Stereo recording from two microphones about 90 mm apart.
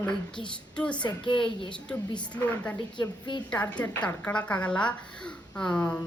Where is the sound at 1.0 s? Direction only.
60° left (ahead or behind).